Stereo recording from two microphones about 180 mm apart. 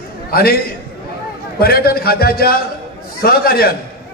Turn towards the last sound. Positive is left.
turn(degrees=60)  # may be behind; listen again after turning